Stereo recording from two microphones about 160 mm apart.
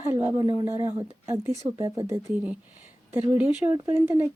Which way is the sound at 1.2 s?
15° right (ahead or behind).